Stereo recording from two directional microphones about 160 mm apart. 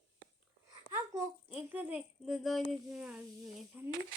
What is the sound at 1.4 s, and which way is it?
Speech, 10° right (ahead or behind).